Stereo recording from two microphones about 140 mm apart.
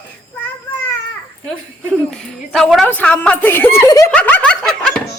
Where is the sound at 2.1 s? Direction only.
5° left (ahead or behind).